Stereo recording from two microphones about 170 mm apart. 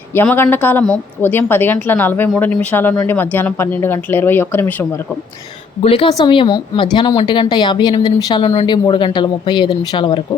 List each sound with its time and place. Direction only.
0.1 s speech: 15° left (ahead or behind)
5.8 s a woman's voice: 30° left (ahead or behind)